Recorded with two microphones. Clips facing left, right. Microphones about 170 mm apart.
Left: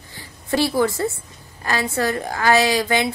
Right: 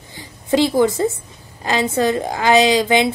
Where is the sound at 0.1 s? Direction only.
20° right (ahead or behind).